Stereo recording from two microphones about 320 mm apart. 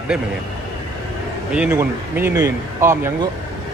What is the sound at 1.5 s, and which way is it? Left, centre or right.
Speech, centre.